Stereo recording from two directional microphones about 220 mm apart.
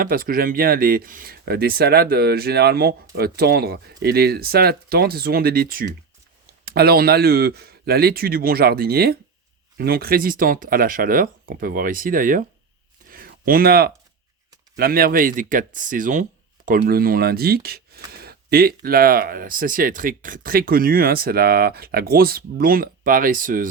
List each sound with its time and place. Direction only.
0.0 s speech: 40° right (ahead or behind)
13.1 s a sound: 40° right (ahead or behind)
14.8 s speech: 40° right (ahead or behind)